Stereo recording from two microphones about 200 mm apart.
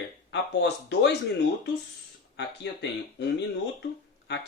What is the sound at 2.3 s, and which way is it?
Speech, 60° left (ahead or behind).